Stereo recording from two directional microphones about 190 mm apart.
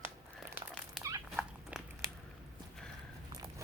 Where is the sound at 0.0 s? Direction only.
10° right (ahead or behind).